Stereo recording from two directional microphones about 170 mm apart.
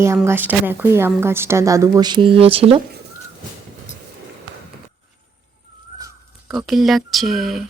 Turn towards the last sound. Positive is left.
turn(degrees=0)  # may be behind; listen again after turning